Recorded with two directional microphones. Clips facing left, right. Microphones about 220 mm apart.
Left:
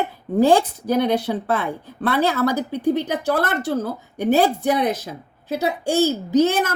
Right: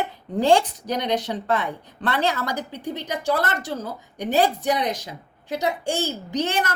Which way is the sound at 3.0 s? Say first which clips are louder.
Left 3 dB; 15° right (ahead or behind).